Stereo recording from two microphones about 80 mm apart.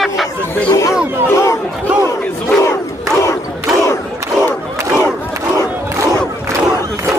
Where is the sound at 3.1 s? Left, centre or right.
Left.